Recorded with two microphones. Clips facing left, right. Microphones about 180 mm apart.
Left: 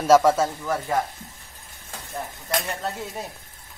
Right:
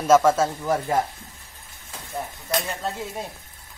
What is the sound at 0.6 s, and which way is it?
Speech, 20° right (ahead or behind).